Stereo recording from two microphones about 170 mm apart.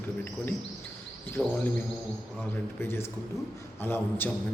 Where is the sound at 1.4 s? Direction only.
5° left (ahead or behind).